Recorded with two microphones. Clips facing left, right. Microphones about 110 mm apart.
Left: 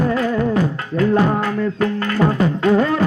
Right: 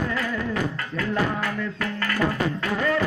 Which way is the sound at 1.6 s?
30° left (ahead or behind).